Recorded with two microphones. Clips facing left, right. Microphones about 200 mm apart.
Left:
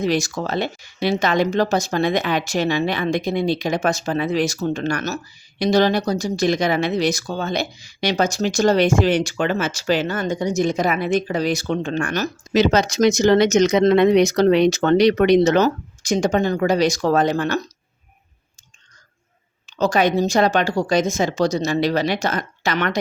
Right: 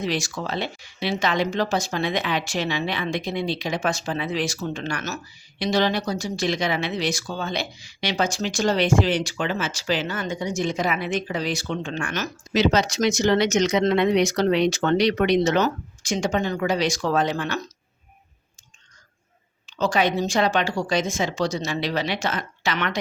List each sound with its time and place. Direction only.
0.0 s speech: 45° left (ahead or behind)
19.8 s speech: 45° left (ahead or behind)